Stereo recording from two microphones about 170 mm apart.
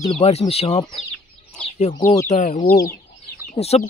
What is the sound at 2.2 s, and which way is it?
Speech, 45° left (ahead or behind).